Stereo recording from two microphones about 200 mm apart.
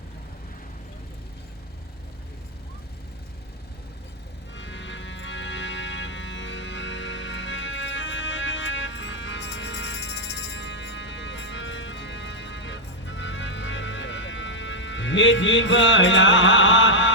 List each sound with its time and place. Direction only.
4.5 s music: 65° left (ahead or behind)